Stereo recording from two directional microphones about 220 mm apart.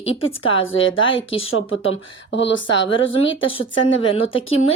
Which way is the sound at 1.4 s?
65° left (ahead or behind).